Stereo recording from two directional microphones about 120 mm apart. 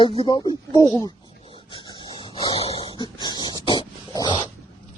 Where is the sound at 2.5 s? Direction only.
55° left (ahead or behind); by 4.3 s 35° left (ahead or behind).